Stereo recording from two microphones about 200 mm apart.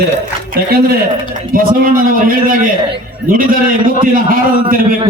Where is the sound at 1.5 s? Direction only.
45° right (ahead or behind).